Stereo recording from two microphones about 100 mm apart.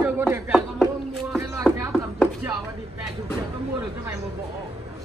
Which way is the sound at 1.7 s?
15° left (ahead or behind).